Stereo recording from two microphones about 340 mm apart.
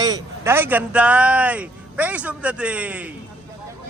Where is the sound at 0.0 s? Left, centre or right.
Centre.